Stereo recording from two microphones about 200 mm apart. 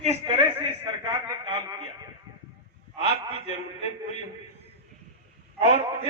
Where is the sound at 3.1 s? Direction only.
30° left (ahead or behind).